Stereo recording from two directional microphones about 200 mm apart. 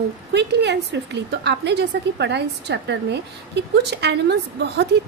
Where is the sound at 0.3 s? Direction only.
55° right (ahead or behind).